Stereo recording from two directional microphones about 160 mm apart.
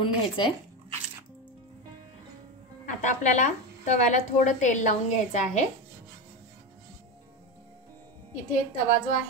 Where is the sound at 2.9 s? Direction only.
50° left (ahead or behind).